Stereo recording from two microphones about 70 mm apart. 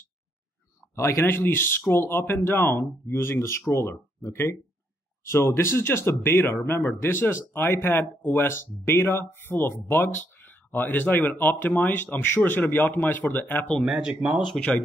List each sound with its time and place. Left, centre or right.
0.9 s speech: left
13.6 s speech: centre
13.9 s speech: centre